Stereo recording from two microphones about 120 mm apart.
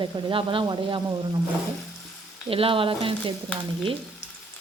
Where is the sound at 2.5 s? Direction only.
50° right (ahead or behind).